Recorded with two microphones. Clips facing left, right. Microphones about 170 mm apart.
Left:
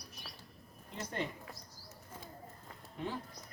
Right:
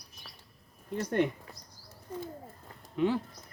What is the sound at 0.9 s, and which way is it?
Speech, 55° right (ahead or behind).